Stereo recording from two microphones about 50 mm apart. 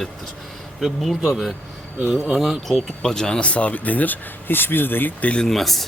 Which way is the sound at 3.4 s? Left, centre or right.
Left.